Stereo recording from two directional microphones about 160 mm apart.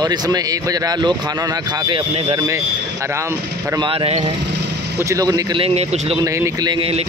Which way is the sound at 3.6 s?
30° right (ahead or behind).